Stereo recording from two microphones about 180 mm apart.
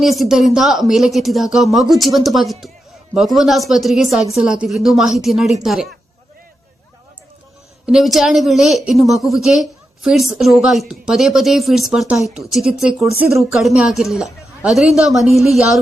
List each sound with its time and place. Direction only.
0.0 s a woman's voice: centre (ahead or behind)
7.9 s a woman's voice: centre (ahead or behind)